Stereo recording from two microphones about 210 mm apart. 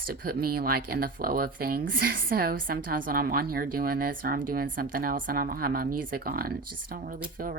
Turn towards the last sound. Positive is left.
turn(degrees=-45)  # may be behind; listen again after turning